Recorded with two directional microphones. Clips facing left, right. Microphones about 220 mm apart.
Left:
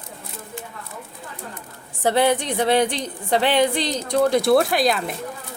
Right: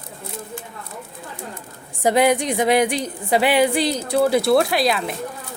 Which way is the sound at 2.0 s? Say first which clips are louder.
Right 2 dB; 10° right (ahead or behind).